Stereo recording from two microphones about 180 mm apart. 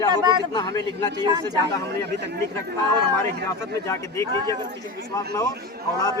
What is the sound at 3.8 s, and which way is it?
Speech, 15° left (ahead or behind).